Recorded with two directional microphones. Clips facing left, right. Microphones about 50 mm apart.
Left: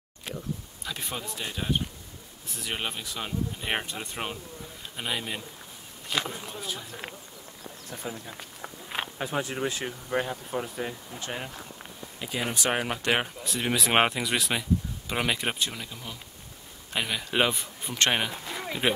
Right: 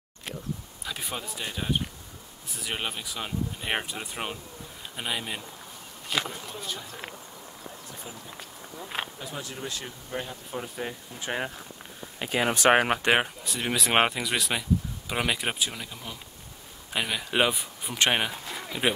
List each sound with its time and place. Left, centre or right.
0.8 s speech: centre
8.1 s speech: left
8.4 s speech: centre
9.2 s speech: left
10.8 s speech: centre
12.2 s speech: right
13.0 s speech: centre
13.4 s speech: centre
18.4 s a sound: centre